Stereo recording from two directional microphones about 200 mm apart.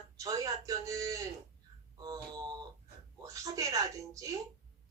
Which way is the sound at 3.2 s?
15° right (ahead or behind).